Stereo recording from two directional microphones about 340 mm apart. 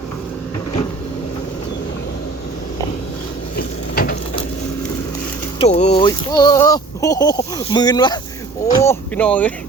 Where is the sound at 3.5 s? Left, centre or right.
Left.